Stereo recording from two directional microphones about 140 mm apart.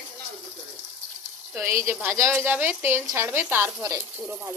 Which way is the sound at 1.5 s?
20° right (ahead or behind).